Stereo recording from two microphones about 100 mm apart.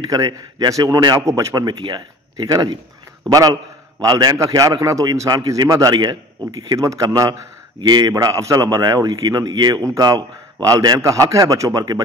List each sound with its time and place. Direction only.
0.0 s a man's voice: 40° right (ahead or behind)
7.8 s speech: 45° right (ahead or behind)
8.1 s a man's voice: 30° right (ahead or behind)